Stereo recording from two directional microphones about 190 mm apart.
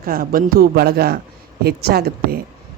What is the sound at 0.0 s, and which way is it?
A man's voice, 50° right (ahead or behind).